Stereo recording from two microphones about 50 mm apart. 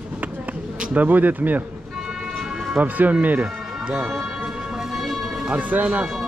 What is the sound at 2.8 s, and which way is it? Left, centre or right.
Speech, right.